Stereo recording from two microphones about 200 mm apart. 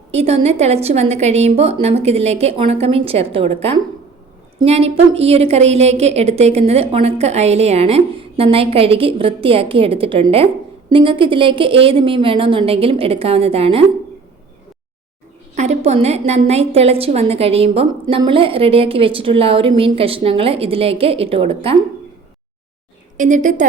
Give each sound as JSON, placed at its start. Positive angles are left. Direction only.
{"t": 0.1, "sound": "a woman's voice", "side_deg": -30}
{"t": 15.5, "sound": "a woman's voice", "side_deg": -35}
{"t": 23.1, "sound": "a woman's voice", "side_deg": -40}